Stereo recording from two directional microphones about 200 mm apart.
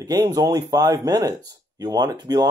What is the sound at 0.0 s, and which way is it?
Speech, 20° right (ahead or behind).